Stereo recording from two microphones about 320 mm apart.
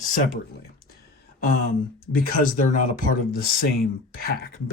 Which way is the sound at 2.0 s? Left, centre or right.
Left.